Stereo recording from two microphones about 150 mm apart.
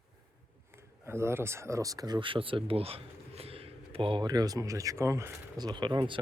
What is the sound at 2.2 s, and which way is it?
Speech, 35° right (ahead or behind).